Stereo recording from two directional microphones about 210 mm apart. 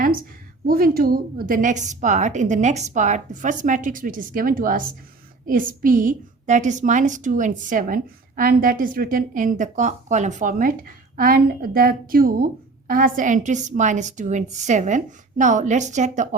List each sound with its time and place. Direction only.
0.7 s a woman's voice: 45° right (ahead or behind)